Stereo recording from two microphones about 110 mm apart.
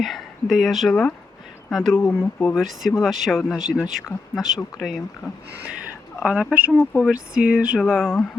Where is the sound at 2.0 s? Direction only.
20° left (ahead or behind).